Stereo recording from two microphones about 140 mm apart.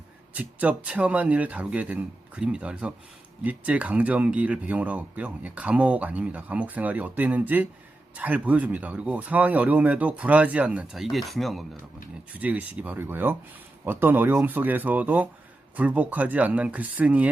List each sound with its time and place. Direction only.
0.3 s speech: 10° right (ahead or behind)
12.4 s speech: 10° right (ahead or behind)